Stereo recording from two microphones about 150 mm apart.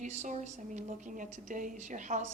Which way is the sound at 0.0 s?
50° right (ahead or behind).